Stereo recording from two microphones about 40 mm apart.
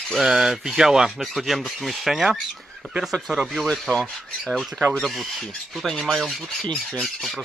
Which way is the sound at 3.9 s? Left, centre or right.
Left.